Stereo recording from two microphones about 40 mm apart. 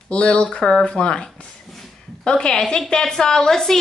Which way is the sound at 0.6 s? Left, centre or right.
Centre.